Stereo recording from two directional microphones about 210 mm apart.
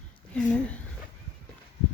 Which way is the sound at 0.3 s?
5° left (ahead or behind).